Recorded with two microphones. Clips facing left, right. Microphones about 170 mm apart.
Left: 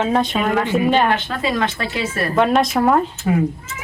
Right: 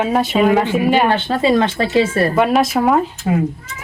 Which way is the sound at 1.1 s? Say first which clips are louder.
Right 5 dB; 30° right (ahead or behind).